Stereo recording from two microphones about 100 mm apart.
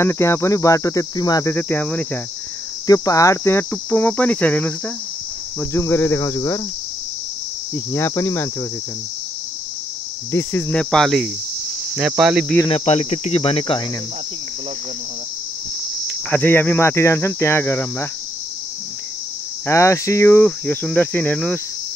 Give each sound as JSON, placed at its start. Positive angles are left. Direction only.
{"t": 0.0, "sound": "speech", "side_deg": 25}
{"t": 1.4, "sound": "cricket", "side_deg": 20}
{"t": 2.9, "sound": "speech", "side_deg": 35}
{"t": 3.7, "sound": "cricket", "side_deg": 15}
{"t": 5.7, "sound": "speech", "side_deg": 25}
{"t": 7.7, "sound": "speech", "side_deg": 25}
{"t": 10.7, "sound": "cricket", "side_deg": 10}
{"t": 12.0, "sound": "speech", "side_deg": -10}
{"t": 12.6, "sound": "cricket", "side_deg": 80}
{"t": 16.1, "sound": "speech", "side_deg": 15}
{"t": 19.6, "sound": "speech", "side_deg": 30}